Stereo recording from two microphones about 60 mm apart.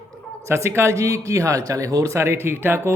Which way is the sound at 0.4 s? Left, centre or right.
Right.